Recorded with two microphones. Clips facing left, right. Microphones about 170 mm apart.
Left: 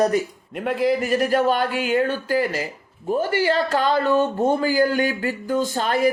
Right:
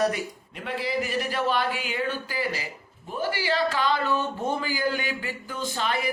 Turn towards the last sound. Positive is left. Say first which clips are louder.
# left 7 dB
turn(degrees=45)  # may be behind; listen again after turning